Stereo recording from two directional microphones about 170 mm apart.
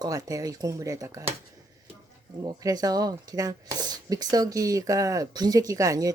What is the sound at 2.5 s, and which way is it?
Speech, 20° right (ahead or behind).